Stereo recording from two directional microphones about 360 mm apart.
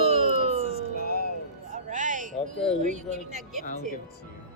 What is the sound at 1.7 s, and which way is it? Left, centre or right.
Music, right.